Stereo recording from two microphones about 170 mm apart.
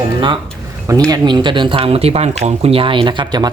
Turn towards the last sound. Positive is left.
turn(degrees=-25)  # may be behind; listen again after turning